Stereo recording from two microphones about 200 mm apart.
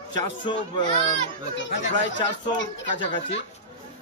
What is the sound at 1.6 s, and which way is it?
Speech, 65° left (ahead or behind).